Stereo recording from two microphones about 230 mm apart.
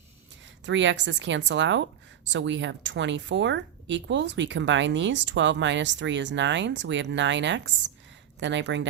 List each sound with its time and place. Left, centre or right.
0.6 s speech: right